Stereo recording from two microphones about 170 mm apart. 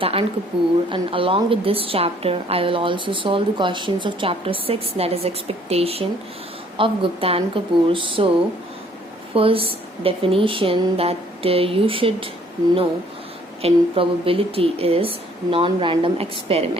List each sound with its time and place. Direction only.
0.0 s a woman's voice: 35° right (ahead or behind)
9.3 s a woman's voice: 35° right (ahead or behind)
13.6 s a woman's voice: 35° right (ahead or behind)